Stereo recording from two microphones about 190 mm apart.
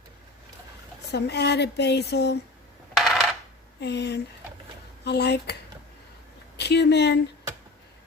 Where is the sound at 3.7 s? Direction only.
65° left (ahead or behind).